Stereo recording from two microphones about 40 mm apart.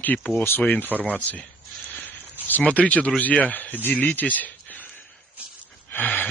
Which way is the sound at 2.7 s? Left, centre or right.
Left.